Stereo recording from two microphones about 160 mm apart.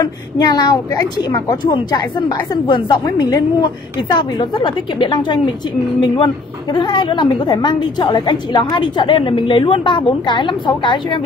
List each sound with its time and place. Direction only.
0.0 s a woman's voice: 25° left (ahead or behind)